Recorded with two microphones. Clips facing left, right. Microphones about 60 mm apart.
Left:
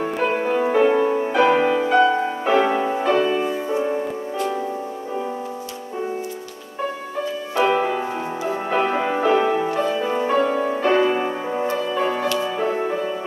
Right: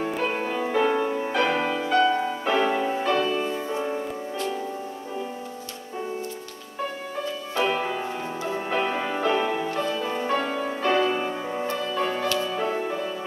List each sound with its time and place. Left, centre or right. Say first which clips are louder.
0.1 s music: left 6 dB; centre
7.5 s music: left 6 dB; centre